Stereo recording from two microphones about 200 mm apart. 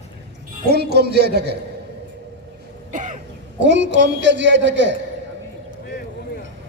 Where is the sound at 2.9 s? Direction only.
40° right (ahead or behind).